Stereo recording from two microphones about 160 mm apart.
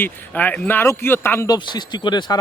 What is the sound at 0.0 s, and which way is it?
A man's voice, 10° left (ahead or behind).